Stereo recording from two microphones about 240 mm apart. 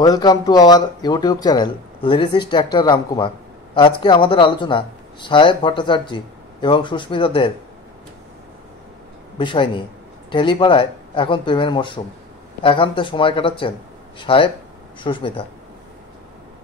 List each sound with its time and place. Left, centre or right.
0.0 s speech: centre
9.4 s speech: centre